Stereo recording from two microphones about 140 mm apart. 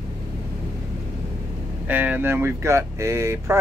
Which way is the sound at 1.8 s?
10° right (ahead or behind).